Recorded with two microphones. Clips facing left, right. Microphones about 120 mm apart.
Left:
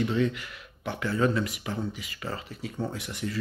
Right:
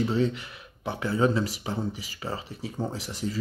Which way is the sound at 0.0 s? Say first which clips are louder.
Right 1 dB; 30° right (ahead or behind).